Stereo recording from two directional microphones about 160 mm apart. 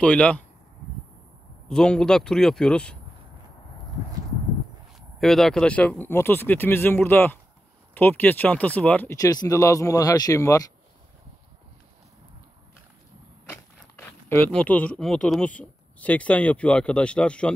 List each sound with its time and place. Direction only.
0.0 s speech: 5° left (ahead or behind)
1.7 s speech: 5° left (ahead or behind)
4.9 s speech: centre (ahead or behind)
9.1 s speech: 20° left (ahead or behind)
14.5 s speech: 10° left (ahead or behind)